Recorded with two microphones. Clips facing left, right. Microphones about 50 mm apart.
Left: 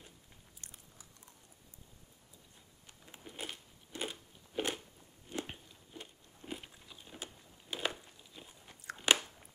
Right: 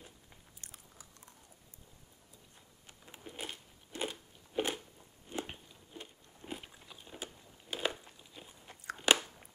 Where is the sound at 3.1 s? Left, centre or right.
Centre.